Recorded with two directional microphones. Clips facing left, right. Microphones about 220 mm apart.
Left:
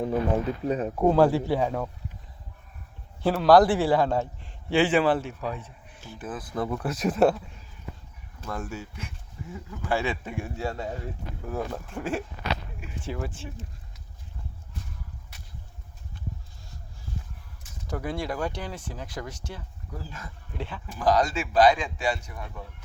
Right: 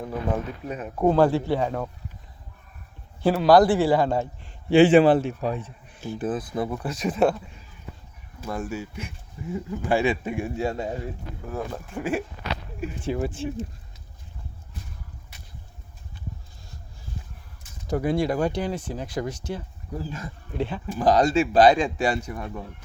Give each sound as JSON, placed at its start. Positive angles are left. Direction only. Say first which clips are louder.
{"t": 0.7, "sound": "speech", "louder": "left 8 dB", "side_deg": 35}
{"t": 0.9, "sound": "a man's voice", "louder": "right 2 dB", "side_deg": 5}
{"t": 3.2, "sound": "a man's voice", "louder": "right 1 dB", "side_deg": 0}
{"t": 4.7, "sound": "speech", "louder": "right 7 dB", "side_deg": -20}
{"t": 6.5, "sound": "speech", "louder": "right 2 dB", "side_deg": -10}
{"t": 6.8, "sound": "a man's voice", "louder": "left 1 dB", "side_deg": 5}
{"t": 8.4, "sound": "speech", "louder": "right 4 dB", "side_deg": -10}
{"t": 11.4, "sound": "a man's voice", "louder": "even", "side_deg": 0}
{"t": 13.1, "sound": "speech", "louder": "right 7 dB", "side_deg": -20}
{"t": 17.9, "sound": "speech", "louder": "right 7 dB", "side_deg": -15}